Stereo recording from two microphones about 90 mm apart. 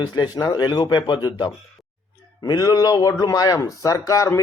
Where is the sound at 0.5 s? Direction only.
55° left (ahead or behind).